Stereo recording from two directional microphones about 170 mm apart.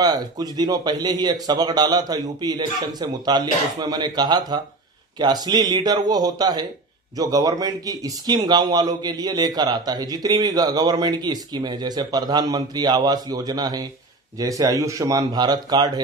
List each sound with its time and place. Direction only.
0.0 s speech: 25° right (ahead or behind)